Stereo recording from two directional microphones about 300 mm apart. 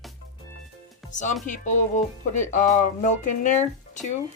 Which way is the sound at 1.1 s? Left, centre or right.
Left.